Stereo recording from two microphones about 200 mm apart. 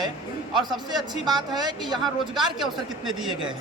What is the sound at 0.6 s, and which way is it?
Speech, 20° right (ahead or behind).